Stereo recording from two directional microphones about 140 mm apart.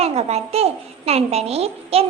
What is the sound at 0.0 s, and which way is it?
A child's voice, 45° right (ahead or behind).